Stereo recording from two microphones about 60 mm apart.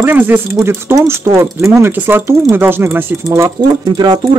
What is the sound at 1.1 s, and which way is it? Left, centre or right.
Speech, right.